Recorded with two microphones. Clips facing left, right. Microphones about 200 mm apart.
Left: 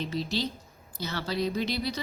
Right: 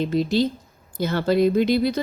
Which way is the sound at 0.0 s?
50° right (ahead or behind).